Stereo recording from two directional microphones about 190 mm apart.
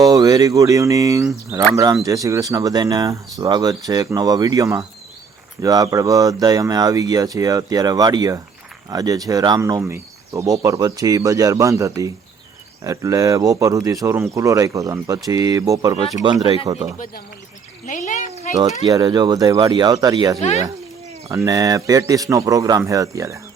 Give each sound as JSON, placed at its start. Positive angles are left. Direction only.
{"t": 0.0, "sound": "speech", "side_deg": -20}
{"t": 17.8, "sound": "speech", "side_deg": 40}
{"t": 18.9, "sound": "speech", "side_deg": -20}